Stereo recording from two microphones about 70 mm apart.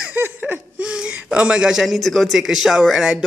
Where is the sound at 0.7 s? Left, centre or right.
Centre.